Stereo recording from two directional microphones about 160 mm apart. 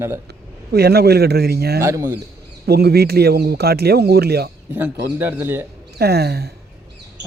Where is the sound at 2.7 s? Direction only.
90° right.